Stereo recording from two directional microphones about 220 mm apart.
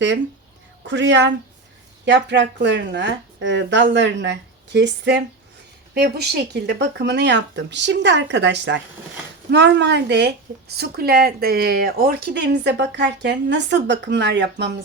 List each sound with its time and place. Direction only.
0.9 s speech: 55° right (ahead or behind)